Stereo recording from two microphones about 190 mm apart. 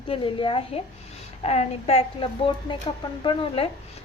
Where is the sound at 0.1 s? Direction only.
25° left (ahead or behind).